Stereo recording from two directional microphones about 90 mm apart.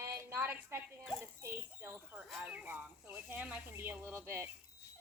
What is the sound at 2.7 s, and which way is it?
Speech, 25° right (ahead or behind).